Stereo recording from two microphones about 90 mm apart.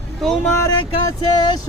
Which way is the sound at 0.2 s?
5° left (ahead or behind).